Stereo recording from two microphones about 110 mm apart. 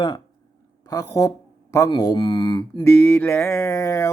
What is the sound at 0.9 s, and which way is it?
Speech, 30° left (ahead or behind).